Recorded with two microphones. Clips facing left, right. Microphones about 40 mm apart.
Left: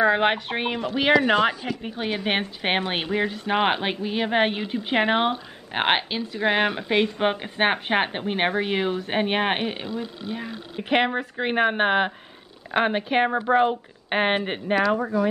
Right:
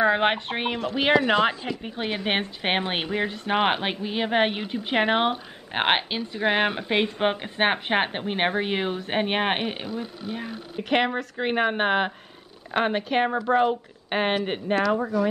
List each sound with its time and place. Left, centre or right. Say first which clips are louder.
0.0 s speech: left 1 dB; centre
7.2 s speech: left 1 dB; centre
10.9 s a woman's voice: left 1 dB; centre